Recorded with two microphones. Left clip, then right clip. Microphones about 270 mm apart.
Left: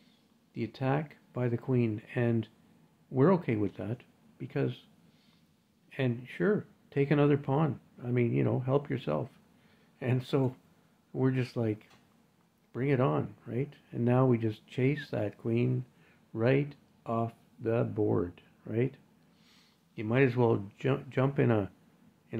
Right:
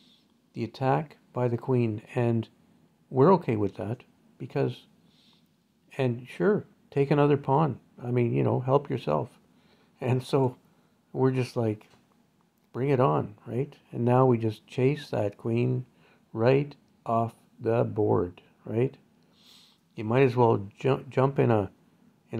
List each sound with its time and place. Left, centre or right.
0.5 s speech: centre
5.9 s speech: centre